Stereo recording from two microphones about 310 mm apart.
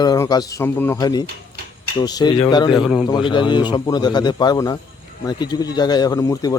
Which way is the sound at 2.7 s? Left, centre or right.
Centre.